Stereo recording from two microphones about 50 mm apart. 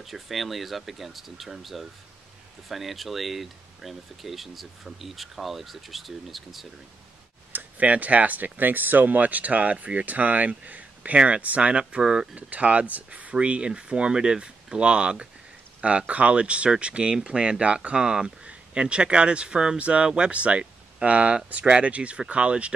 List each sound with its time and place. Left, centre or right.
0.0 s speech: centre
7.5 s speech: right
11.9 s speech: centre
12.4 s speech: right